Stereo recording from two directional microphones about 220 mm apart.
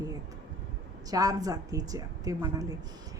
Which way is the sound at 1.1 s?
15° right (ahead or behind).